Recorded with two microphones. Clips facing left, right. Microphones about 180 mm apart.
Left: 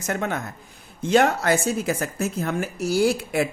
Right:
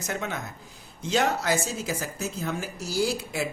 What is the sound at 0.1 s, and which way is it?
Speech, 55° left (ahead or behind).